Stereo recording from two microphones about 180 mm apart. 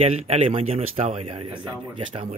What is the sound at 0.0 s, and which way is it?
Speech, 35° right (ahead or behind).